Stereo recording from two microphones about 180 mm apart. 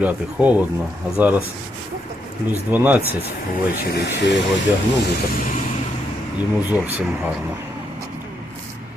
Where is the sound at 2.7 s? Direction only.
10° right (ahead or behind).